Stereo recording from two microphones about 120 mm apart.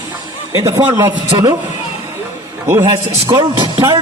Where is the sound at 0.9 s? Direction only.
30° right (ahead or behind).